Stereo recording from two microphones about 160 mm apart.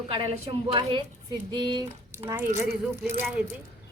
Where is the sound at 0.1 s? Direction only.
35° right (ahead or behind).